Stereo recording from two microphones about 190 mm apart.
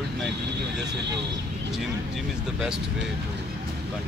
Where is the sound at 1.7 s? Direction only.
5° right (ahead or behind).